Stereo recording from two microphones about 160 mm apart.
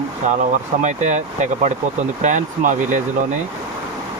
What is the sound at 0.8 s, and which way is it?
Speech, 50° right (ahead or behind).